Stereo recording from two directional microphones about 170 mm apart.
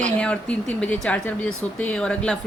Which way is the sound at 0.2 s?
5° left (ahead or behind).